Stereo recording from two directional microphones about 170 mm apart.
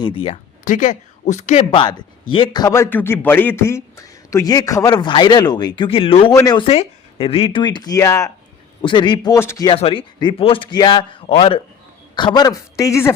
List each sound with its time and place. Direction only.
0.0 s speech: 35° left (ahead or behind)
0.6 s a man's voice: 50° left (ahead or behind); by 6.7 s 20° left (ahead or behind)
6.7 s a man's voice: 35° left (ahead or behind); by 8.3 s 20° left (ahead or behind)
8.8 s a man's voice: 30° left (ahead or behind)
9.6 s a man's voice: 30° left (ahead or behind); by 13.1 s 15° left (ahead or behind)